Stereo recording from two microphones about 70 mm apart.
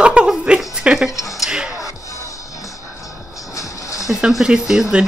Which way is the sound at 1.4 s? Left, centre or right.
Centre.